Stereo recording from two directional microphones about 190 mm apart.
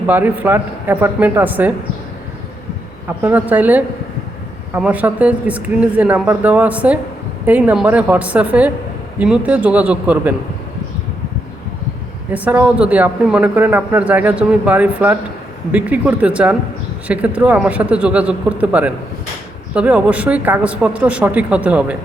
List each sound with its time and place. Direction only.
0.1 s speech: 10° right (ahead or behind)
3.2 s speech: 10° right (ahead or behind)
12.3 s speech: 10° right (ahead or behind)